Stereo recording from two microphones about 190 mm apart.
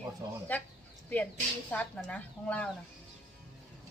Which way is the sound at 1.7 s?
5° left (ahead or behind).